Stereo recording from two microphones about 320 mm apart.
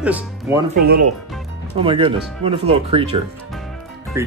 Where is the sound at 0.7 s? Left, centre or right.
Right.